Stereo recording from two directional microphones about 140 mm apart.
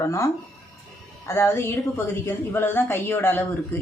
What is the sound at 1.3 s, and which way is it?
A man's voice, 20° left (ahead or behind).